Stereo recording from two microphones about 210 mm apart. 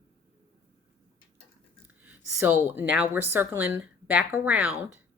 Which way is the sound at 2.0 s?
10° right (ahead or behind).